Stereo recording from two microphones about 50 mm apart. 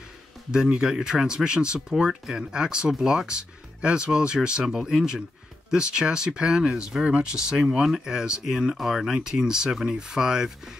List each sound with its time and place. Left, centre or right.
0.5 s speech: centre
9.1 s speech: centre